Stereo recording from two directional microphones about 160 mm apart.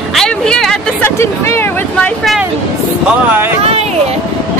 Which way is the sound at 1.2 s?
15° left (ahead or behind).